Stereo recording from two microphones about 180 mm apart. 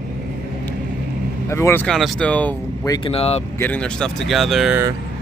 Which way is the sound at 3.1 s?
35° left (ahead or behind).